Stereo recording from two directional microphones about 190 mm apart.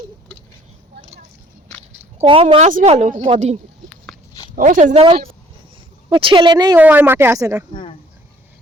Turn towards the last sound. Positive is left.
turn(degrees=-15)  # may be behind; listen again after turning